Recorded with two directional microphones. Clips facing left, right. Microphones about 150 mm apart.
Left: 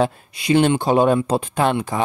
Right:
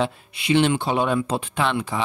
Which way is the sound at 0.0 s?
40° left (ahead or behind).